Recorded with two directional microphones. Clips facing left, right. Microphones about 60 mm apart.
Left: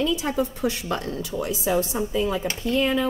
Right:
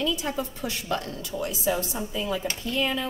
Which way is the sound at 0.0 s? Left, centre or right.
Left.